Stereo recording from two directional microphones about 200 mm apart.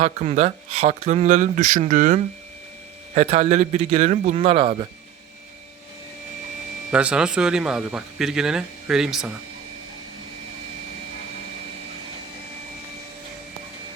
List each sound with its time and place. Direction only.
0.0 s speech: 35° right (ahead or behind)
6.9 s speech: 5° right (ahead or behind)